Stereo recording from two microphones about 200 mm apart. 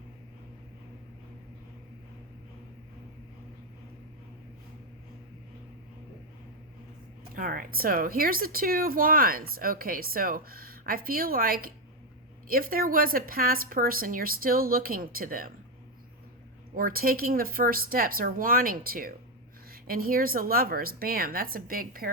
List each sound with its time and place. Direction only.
7.3 s a woman's voice: 45° right (ahead or behind)
16.7 s a woman's voice: 45° right (ahead or behind)